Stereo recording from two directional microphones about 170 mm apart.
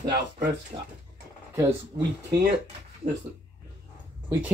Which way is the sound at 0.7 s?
25° right (ahead or behind).